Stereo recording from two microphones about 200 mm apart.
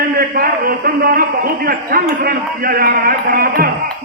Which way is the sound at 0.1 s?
50° right (ahead or behind).